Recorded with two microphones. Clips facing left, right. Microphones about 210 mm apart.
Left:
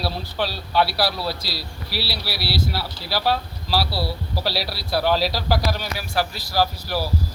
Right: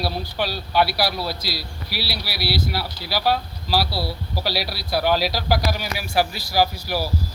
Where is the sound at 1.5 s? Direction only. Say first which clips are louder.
Even; 30° left (ahead or behind).